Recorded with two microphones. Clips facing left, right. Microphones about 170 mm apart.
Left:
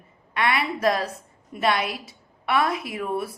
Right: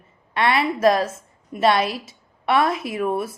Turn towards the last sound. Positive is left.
turn(degrees=-20)  # may be behind; listen again after turning